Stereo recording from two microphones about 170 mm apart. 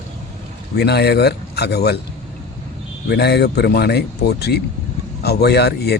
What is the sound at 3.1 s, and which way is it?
Speech, 75° left (ahead or behind).